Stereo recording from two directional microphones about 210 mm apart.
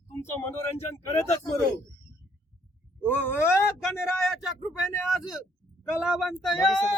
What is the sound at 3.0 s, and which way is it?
Speech, 10° left (ahead or behind).